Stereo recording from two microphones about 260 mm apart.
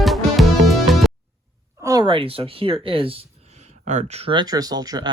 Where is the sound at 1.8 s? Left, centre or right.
Centre.